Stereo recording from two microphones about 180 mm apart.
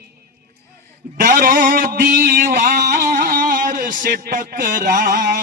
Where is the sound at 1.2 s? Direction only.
55° right (ahead or behind).